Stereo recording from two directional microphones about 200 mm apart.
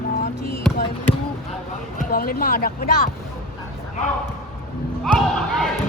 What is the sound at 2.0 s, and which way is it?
Speech, 45° left (ahead or behind).